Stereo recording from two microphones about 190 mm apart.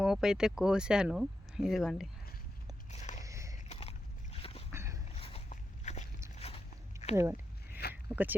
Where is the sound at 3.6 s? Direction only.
30° left (ahead or behind).